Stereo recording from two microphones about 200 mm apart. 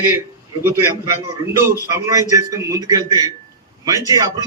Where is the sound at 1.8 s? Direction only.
15° right (ahead or behind).